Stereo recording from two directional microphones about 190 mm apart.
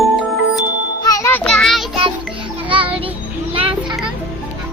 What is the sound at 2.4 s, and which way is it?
Music, 25° right (ahead or behind).